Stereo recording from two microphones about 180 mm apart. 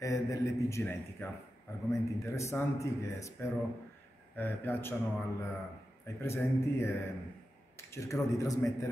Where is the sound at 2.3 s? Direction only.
15° left (ahead or behind).